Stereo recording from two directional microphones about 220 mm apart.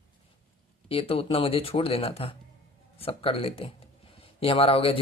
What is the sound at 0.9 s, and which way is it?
Speech, 25° left (ahead or behind).